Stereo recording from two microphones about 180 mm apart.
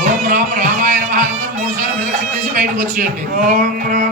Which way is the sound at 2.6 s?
45° right (ahead or behind).